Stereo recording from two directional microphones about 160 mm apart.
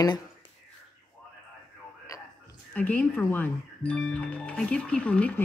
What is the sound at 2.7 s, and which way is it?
Speech, 10° left (ahead or behind).